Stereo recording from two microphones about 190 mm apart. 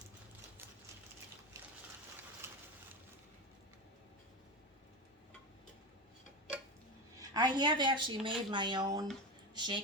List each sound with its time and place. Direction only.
2.4 s pigeon: 15° right (ahead or behind)
7.2 s a woman's voice: 20° right (ahead or behind)